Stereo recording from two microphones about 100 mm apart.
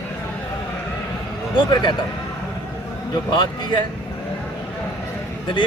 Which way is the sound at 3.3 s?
45° left (ahead or behind).